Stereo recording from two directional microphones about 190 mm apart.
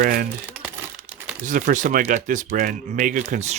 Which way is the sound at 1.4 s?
45° right (ahead or behind).